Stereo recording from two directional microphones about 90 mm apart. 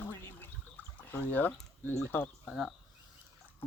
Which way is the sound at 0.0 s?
20° left (ahead or behind).